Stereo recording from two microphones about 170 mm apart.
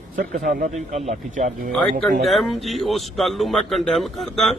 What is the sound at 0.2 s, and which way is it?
Speech, 55° right (ahead or behind).